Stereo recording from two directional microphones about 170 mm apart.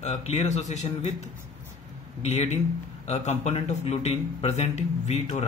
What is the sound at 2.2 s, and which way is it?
Speech, 40° left (ahead or behind).